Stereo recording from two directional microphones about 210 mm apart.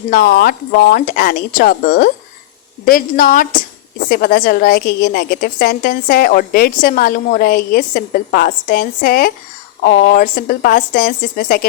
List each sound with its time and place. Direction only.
0.1 s a woman's voice: 45° left (ahead or behind)